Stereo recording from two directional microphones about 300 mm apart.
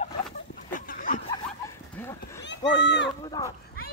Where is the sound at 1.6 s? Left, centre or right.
Centre.